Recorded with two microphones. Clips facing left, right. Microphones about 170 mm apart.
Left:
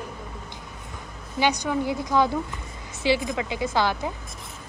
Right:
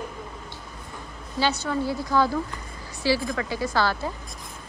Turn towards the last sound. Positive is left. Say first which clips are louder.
# left 1 dB
turn(degrees=15)  # may be behind; listen again after turning